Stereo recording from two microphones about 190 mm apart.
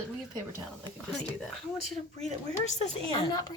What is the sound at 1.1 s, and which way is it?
Speech, centre (ahead or behind).